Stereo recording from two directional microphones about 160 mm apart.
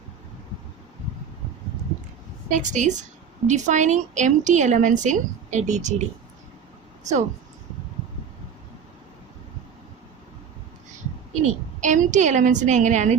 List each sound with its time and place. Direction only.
2.5 s a woman's voice: 50° right (ahead or behind)
11.4 s a woman's voice: 50° right (ahead or behind)